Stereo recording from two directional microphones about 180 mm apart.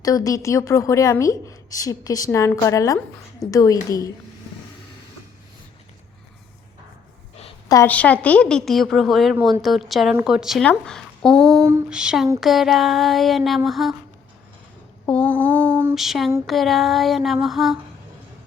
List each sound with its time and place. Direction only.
0.0 s a woman's voice: 20° left (ahead or behind)
7.9 s a woman's voice: 10° left (ahead or behind)
11.6 s a sound: 15° right (ahead or behind)
11.9 s a woman's voice: 5° right (ahead or behind)
15.0 s a woman's voice: 5° left (ahead or behind)